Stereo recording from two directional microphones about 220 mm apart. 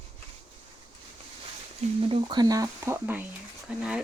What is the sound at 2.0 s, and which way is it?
A woman's voice, 25° right (ahead or behind).